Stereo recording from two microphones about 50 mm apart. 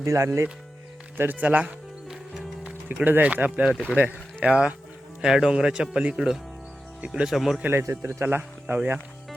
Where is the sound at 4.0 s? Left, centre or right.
Right.